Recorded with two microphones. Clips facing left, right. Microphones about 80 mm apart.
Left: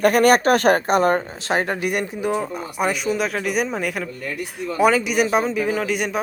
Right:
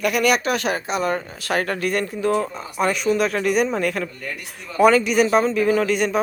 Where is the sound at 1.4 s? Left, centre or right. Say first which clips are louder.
Left 1 dB; left.